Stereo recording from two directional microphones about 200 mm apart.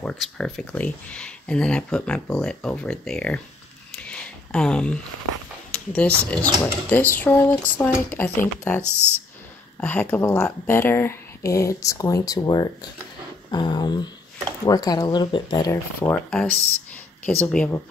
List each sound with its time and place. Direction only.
0.0 s speech: centre (ahead or behind)
4.0 s a sound: 5° left (ahead or behind)
5.7 s speech: 5° left (ahead or behind)